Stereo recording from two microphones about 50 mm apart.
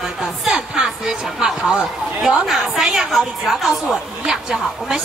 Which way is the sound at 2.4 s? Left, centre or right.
Centre.